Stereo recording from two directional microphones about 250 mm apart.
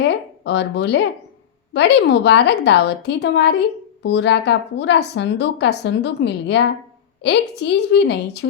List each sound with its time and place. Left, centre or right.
0.0 s a woman's voice: left